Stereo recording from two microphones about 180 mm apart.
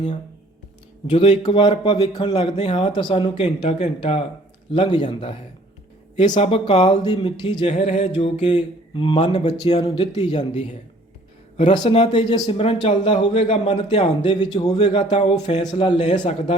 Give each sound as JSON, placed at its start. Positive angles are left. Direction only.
{"t": 1.1, "sound": "speech", "side_deg": 35}
{"t": 1.4, "sound": "speech", "side_deg": 25}
{"t": 7.0, "sound": "speech", "side_deg": 25}
{"t": 15.1, "sound": "speech", "side_deg": 35}